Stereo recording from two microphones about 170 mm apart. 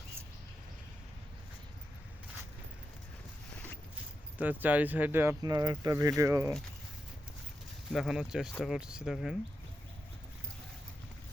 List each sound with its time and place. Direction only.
4.4 s speech: 10° right (ahead or behind)
7.9 s speech: centre (ahead or behind)